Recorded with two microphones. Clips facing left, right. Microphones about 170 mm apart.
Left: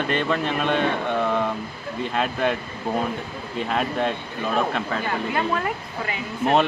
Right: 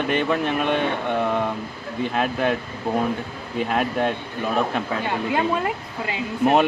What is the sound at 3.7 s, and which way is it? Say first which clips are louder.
Speech: right 1 dB; 5° right (ahead or behind).